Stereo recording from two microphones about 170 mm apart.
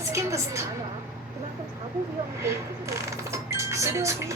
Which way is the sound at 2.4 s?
15° right (ahead or behind).